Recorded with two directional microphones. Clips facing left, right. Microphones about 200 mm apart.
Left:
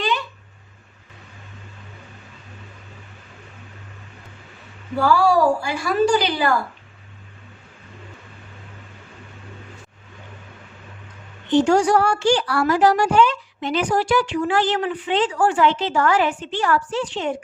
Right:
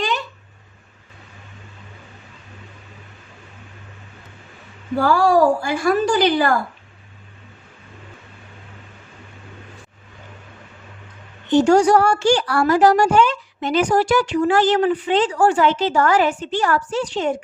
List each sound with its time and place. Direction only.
4.9 s a woman's voice: 50° right (ahead or behind)
11.5 s a woman's voice: 40° right (ahead or behind)